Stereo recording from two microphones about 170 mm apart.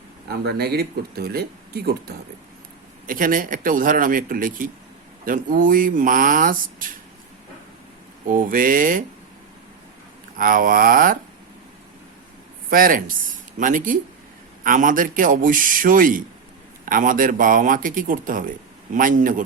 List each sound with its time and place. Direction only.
0.3 s speech: 70° right (ahead or behind)
3.1 s speech: 55° right (ahead or behind)
8.3 s speech: 55° right (ahead or behind)
10.3 s speech: 55° right (ahead or behind)
12.7 s speech: 55° right (ahead or behind)